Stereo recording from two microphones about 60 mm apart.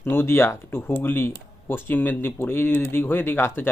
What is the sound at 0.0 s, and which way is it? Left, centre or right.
Speech, left.